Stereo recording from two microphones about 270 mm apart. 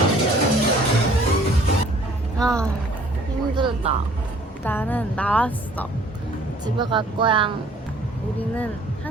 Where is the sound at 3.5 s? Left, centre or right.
Centre.